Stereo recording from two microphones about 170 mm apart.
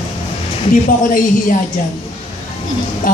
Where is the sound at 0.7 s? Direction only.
50° left (ahead or behind).